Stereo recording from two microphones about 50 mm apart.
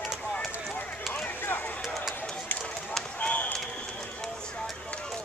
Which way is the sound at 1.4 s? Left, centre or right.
Left.